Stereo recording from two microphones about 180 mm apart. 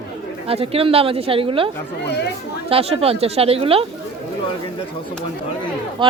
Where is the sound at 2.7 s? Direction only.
30° right (ahead or behind).